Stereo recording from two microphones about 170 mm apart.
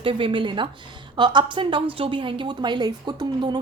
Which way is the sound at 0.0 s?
30° right (ahead or behind).